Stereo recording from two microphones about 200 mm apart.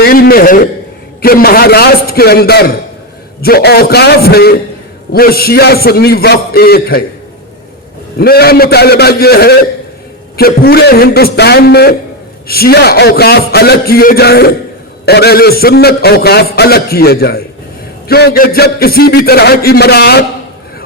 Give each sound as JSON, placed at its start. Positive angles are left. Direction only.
{"t": 0.0, "sound": "a sound", "side_deg": 50}
{"t": 1.2, "sound": "a man's voice", "side_deg": 50}
{"t": 8.2, "sound": "a man's voice", "side_deg": 50}